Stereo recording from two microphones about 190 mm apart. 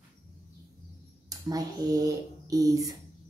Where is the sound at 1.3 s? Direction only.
20° right (ahead or behind).